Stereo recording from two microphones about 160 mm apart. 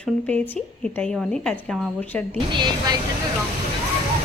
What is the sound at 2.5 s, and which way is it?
Speech, 25° right (ahead or behind).